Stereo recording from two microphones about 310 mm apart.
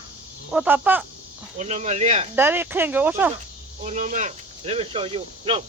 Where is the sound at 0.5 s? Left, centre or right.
Centre.